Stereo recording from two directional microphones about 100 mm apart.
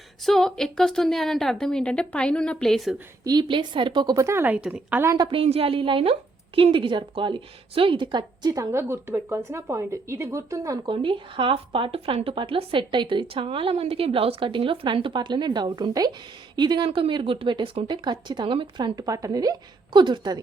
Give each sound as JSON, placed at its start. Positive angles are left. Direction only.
{"t": 0.3, "sound": "a woman's voice", "side_deg": 5}
{"t": 3.2, "sound": "speech", "side_deg": -45}
{"t": 4.1, "sound": "speech", "side_deg": -30}
{"t": 4.5, "sound": "a woman's voice", "side_deg": -15}
{"t": 5.1, "sound": "speech", "side_deg": -45}
{"t": 5.4, "sound": "a woman's voice", "side_deg": -70}
{"t": 10.8, "sound": "speech", "side_deg": -55}